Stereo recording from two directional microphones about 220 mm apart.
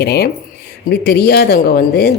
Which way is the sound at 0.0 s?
50° left (ahead or behind).